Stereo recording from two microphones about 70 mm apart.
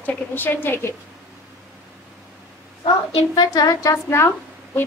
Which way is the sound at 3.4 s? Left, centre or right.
Left.